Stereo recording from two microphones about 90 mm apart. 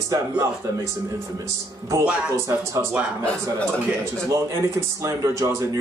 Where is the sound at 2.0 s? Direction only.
10° right (ahead or behind).